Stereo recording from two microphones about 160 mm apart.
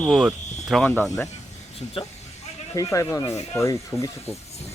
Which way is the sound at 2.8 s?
20° left (ahead or behind).